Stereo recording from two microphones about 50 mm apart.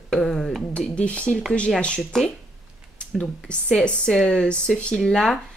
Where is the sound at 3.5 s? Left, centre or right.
Left.